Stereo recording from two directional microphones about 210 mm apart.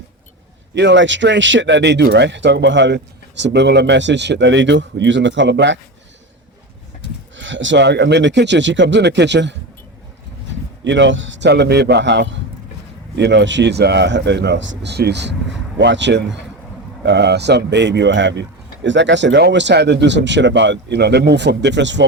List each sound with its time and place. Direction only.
0.7 s speech: 55° right (ahead or behind)
7.3 s speech: 60° right (ahead or behind)
10.8 s speech: 60° right (ahead or behind)